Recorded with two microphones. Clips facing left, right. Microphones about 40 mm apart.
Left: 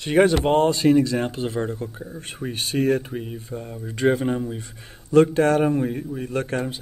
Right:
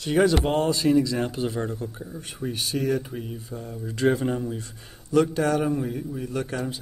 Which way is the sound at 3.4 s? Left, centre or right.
Left.